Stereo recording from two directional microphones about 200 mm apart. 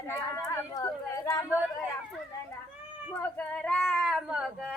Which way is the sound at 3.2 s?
5° left (ahead or behind).